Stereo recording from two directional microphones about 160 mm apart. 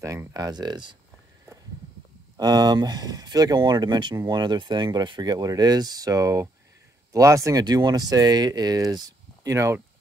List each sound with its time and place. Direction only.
0.0 s speech: 20° right (ahead or behind)
2.3 s speech: 25° right (ahead or behind)